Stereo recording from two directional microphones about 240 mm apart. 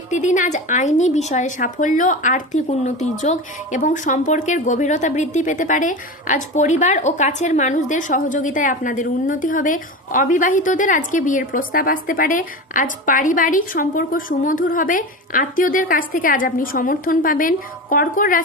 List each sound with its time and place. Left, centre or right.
0.1 s a woman's voice: left